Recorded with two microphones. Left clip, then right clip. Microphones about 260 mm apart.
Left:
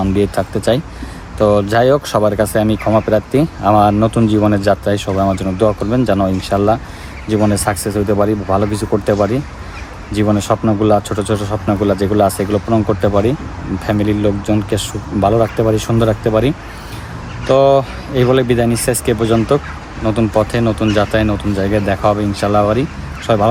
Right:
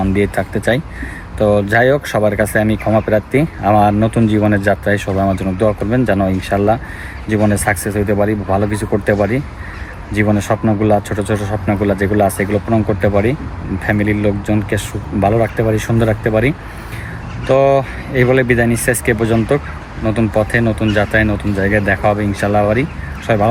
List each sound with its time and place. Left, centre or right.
0.0 s speech: centre